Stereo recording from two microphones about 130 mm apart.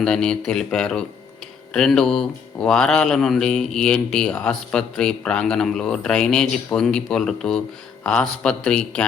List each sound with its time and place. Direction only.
0.0 s a man's voice: 5° left (ahead or behind)